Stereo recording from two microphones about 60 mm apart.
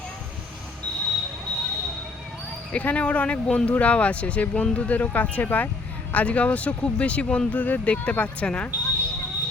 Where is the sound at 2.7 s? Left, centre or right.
Left.